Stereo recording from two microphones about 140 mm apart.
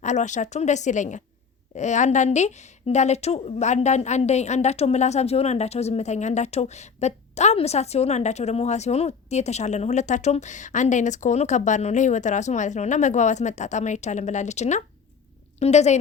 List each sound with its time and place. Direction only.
0.0 s a woman's voice: 60° left (ahead or behind)